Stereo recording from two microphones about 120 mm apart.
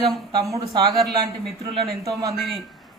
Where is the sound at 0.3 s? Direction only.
30° right (ahead or behind).